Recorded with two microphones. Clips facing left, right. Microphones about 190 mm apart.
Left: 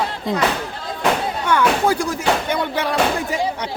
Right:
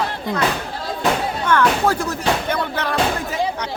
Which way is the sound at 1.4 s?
10° left (ahead or behind).